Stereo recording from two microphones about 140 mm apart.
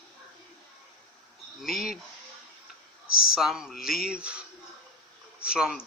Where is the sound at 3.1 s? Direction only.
90° left.